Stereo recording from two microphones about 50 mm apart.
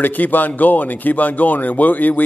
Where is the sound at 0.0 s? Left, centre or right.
Left.